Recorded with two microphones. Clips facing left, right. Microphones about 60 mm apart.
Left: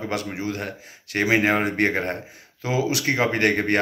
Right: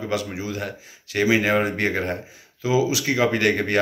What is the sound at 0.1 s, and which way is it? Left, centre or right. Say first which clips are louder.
Speech: right 2 dB; left.